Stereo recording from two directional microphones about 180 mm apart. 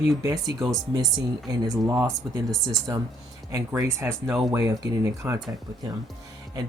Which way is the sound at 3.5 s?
15° right (ahead or behind).